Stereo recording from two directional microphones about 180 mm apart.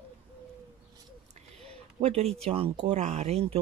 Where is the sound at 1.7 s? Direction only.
35° right (ahead or behind).